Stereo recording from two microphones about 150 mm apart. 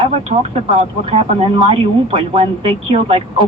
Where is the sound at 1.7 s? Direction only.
40° right (ahead or behind).